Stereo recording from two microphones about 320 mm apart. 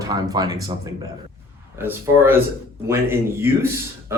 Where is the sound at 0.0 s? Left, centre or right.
Centre.